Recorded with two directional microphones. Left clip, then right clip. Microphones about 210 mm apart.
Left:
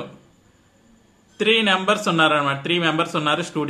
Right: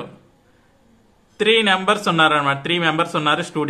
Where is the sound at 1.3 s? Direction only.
15° right (ahead or behind).